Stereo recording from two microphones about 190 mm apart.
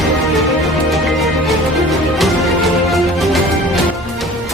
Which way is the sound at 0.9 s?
Centre (ahead or behind).